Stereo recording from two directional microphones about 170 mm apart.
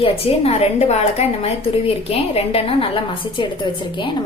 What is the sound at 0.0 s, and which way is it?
A woman's voice, 35° left (ahead or behind).